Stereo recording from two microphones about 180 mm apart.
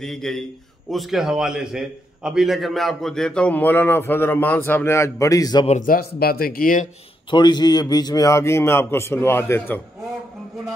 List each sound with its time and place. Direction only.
0.0 s a man's voice: centre (ahead or behind); by 5.7 s 20° left (ahead or behind)
5.7 s speech: 50° left (ahead or behind)
7.2 s a man's voice: 25° left (ahead or behind)